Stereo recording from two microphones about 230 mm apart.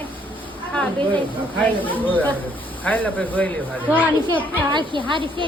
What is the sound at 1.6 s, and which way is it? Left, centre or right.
Speech, centre.